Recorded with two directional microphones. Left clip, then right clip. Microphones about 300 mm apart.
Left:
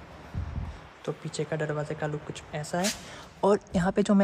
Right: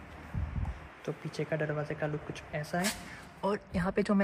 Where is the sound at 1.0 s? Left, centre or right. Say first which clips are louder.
Left 3 dB; centre.